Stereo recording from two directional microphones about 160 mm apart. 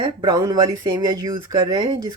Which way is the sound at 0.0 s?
25° right (ahead or behind).